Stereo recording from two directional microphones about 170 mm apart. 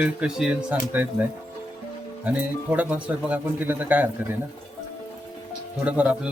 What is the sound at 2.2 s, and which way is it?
Speech, 10° right (ahead or behind).